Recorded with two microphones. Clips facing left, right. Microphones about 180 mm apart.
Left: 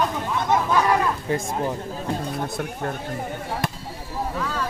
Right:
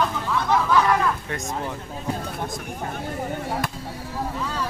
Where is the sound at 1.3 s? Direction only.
30° left (ahead or behind).